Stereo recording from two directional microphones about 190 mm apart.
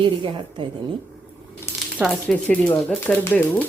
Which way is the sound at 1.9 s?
Centre (ahead or behind).